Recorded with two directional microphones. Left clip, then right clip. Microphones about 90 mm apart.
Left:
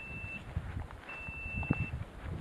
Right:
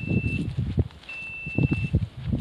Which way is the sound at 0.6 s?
15° right (ahead or behind).